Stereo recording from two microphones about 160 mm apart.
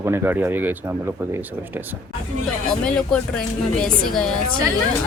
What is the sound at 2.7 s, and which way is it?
A woman's voice, 5° left (ahead or behind).